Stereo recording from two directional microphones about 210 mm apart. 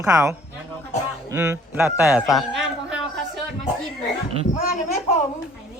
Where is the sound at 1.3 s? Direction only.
10° right (ahead or behind).